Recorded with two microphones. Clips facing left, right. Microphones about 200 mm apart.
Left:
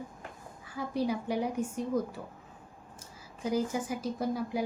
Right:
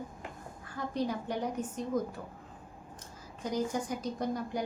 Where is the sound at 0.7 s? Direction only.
10° left (ahead or behind).